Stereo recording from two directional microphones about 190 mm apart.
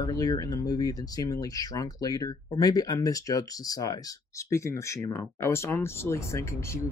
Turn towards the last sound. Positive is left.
turn(degrees=15)  # may be behind; listen again after turning